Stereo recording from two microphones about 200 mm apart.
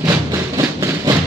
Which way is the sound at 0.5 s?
15° right (ahead or behind).